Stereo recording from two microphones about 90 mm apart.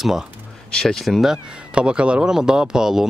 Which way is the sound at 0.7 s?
5° left (ahead or behind).